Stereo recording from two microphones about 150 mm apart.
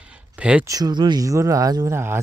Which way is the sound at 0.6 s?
25° right (ahead or behind).